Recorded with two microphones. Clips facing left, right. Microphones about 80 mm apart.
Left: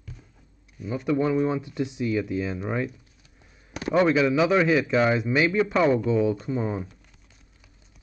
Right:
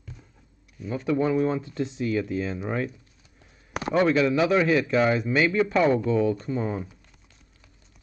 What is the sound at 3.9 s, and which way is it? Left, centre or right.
Speech, centre.